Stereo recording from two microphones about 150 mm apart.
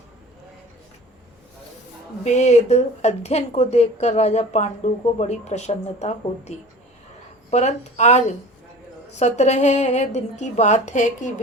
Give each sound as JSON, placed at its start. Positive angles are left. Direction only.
{"t": 2.2, "sound": "speech", "side_deg": 50}
{"t": 7.5, "sound": "speech", "side_deg": 50}